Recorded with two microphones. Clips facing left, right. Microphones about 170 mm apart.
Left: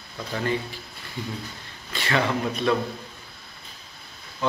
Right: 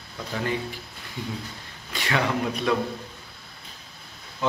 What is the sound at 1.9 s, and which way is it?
Speech, 10° right (ahead or behind).